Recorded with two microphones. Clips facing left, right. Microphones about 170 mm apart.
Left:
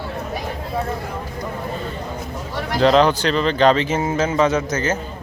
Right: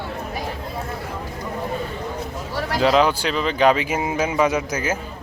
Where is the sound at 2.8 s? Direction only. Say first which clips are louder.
Left 3 dB; 5° right (ahead or behind).